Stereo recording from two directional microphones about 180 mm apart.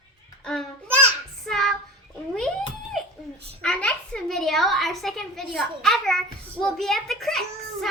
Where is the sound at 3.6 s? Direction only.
5° left (ahead or behind).